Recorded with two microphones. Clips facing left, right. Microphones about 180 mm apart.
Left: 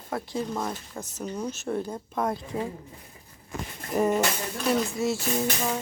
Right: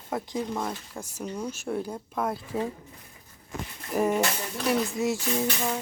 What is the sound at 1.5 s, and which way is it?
Speech, 10° right (ahead or behind).